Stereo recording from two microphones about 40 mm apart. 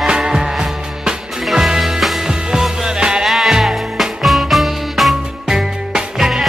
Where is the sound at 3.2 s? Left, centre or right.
Centre.